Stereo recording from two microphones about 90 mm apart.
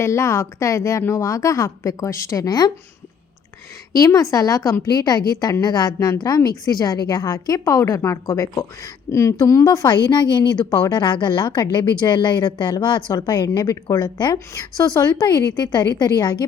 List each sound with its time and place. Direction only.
0.0 s a woman's voice: 35° left (ahead or behind)
3.9 s a woman's voice: 40° left (ahead or behind)
14.3 s a woman's voice: 35° left (ahead or behind)